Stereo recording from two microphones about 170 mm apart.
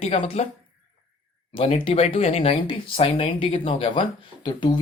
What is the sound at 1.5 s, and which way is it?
A woman's voice, 35° left (ahead or behind).